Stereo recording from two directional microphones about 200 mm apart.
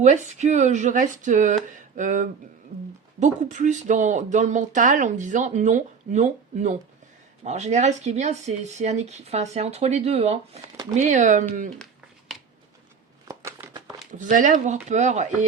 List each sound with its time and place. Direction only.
0.0 s speech: 35° right (ahead or behind)
13.2 s shuffling cards: 15° right (ahead or behind)
14.1 s speech: 40° right (ahead or behind)